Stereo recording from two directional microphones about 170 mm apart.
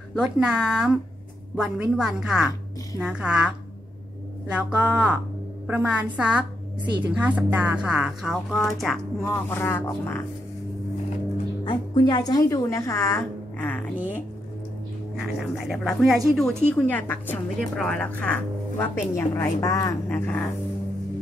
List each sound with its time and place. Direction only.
0.1 s a woman's voice: 5° right (ahead or behind)
9.5 s a woman's voice: 15° left (ahead or behind)
11.6 s a woman's voice: 25° left (ahead or behind)
15.3 s a woman's voice: 5° right (ahead or behind)